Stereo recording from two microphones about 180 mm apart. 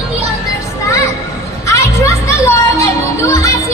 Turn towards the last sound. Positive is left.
turn(degrees=15)  # may be behind; listen again after turning